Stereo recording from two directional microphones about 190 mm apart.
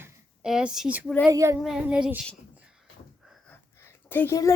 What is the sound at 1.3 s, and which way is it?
Child singing, 15° right (ahead or behind).